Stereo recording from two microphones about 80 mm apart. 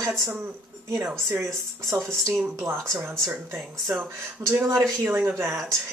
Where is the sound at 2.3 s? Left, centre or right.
Right.